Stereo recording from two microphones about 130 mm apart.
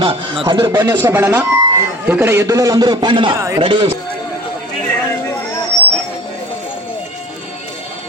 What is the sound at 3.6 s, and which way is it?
Speech, 40° right (ahead or behind).